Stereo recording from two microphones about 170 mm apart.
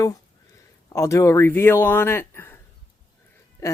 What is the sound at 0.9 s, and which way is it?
Speech, 15° left (ahead or behind).